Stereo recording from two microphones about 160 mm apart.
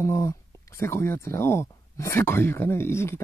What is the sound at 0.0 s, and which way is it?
Speech, 20° left (ahead or behind).